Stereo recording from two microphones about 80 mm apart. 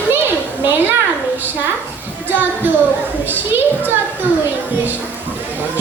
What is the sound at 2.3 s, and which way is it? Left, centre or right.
A child's voice, right.